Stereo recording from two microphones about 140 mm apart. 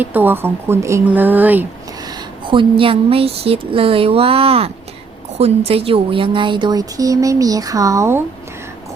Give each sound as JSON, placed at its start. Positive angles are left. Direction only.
{"t": 0.0, "sound": "speech", "side_deg": -15}
{"t": 2.0, "sound": "a woman's voice", "side_deg": -35}